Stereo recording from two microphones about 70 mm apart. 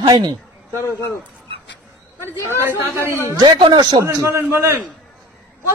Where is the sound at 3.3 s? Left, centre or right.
Right.